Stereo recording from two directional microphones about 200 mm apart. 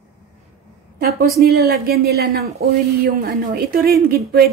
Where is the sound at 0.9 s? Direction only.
50° right (ahead or behind).